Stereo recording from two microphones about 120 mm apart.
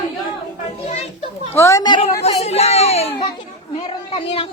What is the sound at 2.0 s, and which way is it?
Speech, 60° left (ahead or behind).